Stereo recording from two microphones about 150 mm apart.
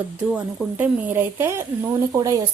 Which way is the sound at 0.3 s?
10° right (ahead or behind).